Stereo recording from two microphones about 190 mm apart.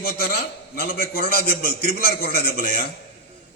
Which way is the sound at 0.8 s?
55° left (ahead or behind).